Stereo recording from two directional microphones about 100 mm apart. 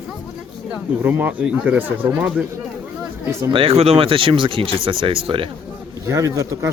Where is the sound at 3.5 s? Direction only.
65° right (ahead or behind).